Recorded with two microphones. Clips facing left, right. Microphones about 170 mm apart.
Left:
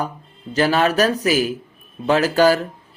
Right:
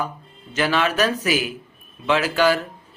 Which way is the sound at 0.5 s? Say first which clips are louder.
Left 4 dB; 40° left (ahead or behind).